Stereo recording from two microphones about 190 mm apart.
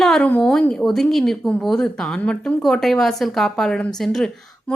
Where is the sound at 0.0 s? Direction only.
5° left (ahead or behind).